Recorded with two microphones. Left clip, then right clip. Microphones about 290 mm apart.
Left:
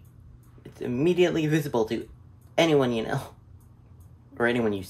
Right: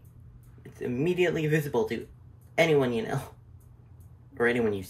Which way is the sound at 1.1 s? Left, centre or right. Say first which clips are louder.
Left 3 dB; centre.